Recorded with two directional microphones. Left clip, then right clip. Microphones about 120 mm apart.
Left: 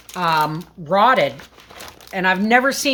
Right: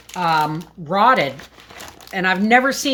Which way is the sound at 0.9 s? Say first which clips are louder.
Even; 15° left (ahead or behind).